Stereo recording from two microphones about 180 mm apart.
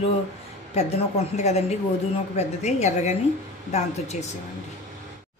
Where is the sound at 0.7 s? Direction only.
35° left (ahead or behind).